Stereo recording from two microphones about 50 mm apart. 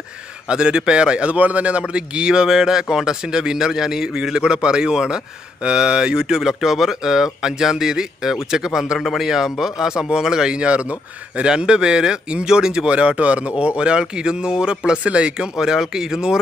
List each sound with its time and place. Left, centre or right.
0.5 s a man's voice: centre